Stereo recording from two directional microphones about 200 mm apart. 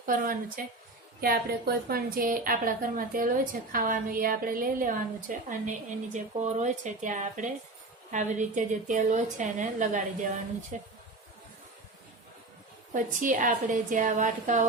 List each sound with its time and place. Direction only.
0.0 s a woman's voice: 45° right (ahead or behind)
12.9 s a woman's voice: 40° right (ahead or behind)